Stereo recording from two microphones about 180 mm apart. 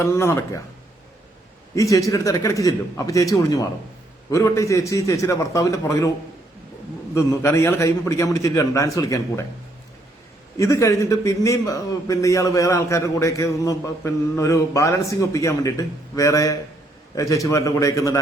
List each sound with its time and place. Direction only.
0.0 s a man's voice: 15° left (ahead or behind)
1.7 s a man's voice: 20° left (ahead or behind)
7.1 s a man's voice: 15° left (ahead or behind)
10.6 s a man's voice: 15° left (ahead or behind)